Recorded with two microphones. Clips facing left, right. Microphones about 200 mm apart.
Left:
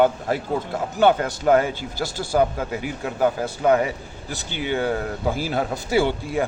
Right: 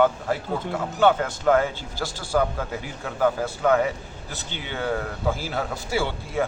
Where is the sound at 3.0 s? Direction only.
15° left (ahead or behind).